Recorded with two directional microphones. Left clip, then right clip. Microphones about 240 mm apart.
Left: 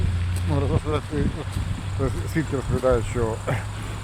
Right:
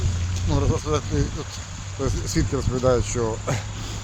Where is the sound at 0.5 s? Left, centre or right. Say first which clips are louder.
Right 1 dB; centre.